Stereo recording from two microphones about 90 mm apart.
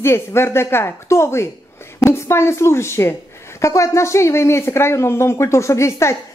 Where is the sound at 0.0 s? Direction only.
30° left (ahead or behind).